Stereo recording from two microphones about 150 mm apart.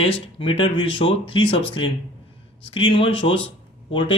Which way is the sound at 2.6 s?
35° left (ahead or behind).